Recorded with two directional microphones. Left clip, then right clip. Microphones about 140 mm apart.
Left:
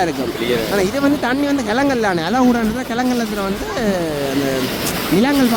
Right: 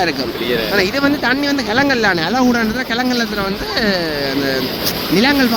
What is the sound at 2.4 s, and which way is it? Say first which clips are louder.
Speech: right 1 dB; 5° right (ahead or behind).